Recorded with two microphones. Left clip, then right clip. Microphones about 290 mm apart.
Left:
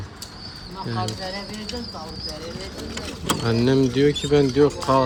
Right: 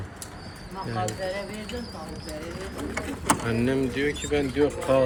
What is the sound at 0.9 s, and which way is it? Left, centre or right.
Speech, left.